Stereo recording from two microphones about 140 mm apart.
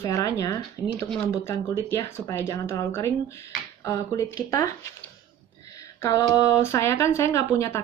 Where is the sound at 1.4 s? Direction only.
20° left (ahead or behind).